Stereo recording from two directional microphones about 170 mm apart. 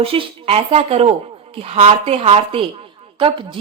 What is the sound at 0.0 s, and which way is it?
A woman's voice, 35° right (ahead or behind).